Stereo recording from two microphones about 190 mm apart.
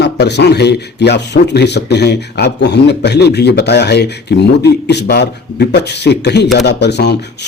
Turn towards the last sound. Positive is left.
turn(degrees=60)  # may be behind; listen again after turning